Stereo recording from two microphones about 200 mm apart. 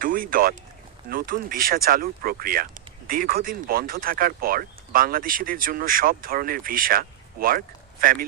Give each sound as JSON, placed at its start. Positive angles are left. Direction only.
{"t": 0.0, "sound": "speech", "side_deg": -45}